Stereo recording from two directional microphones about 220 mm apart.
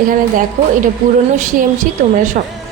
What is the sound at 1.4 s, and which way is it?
A woman's voice, 35° right (ahead or behind).